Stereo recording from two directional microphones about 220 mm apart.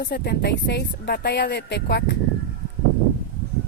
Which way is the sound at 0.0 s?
50° left (ahead or behind).